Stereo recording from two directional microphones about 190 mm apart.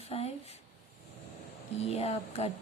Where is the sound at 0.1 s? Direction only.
30° left (ahead or behind).